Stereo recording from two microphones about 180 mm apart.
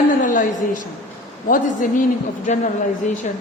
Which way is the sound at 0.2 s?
45° left (ahead or behind).